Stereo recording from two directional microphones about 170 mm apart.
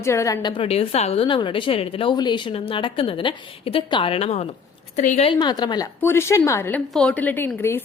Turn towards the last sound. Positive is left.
turn(degrees=10)  # may be behind; listen again after turning